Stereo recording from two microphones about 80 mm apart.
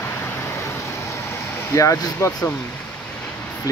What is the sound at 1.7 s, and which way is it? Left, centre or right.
Speech, left.